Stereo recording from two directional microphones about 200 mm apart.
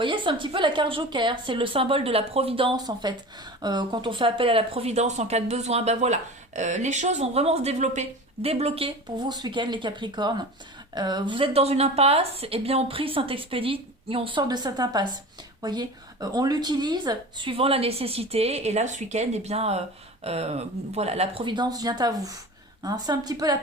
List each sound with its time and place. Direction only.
0.0 s speech: 25° right (ahead or behind)